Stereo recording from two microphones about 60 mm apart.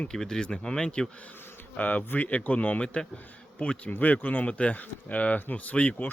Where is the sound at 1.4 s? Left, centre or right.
Left.